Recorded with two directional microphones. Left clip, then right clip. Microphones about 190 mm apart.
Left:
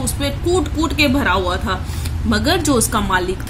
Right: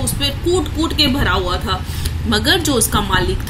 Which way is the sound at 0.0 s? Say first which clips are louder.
Right 2 dB; 60° left (ahead or behind).